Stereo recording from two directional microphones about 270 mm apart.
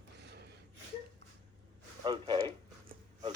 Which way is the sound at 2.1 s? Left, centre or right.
Centre.